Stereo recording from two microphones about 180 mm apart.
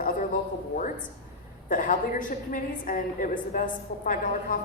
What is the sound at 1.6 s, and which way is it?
A woman's voice, 50° left (ahead or behind).